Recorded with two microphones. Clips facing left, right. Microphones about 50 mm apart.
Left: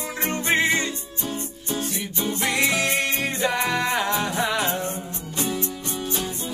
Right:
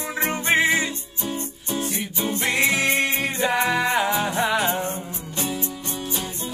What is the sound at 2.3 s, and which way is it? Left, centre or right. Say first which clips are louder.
Music: right 1 dB; right.